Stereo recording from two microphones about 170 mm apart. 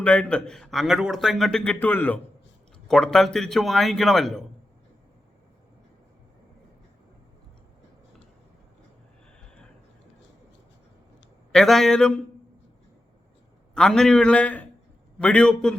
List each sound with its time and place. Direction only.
0.0 s a man's voice: 5° left (ahead or behind)
11.5 s a man's voice: centre (ahead or behind)
13.7 s a man's voice: 5° left (ahead or behind)